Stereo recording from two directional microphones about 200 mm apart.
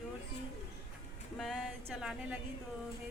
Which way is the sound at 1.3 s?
Centre (ahead or behind).